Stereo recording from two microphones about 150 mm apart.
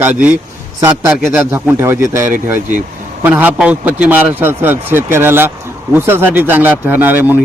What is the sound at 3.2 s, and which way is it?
A man's voice, 15° right (ahead or behind).